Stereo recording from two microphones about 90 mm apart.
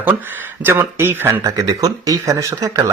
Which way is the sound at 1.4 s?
40° right (ahead or behind).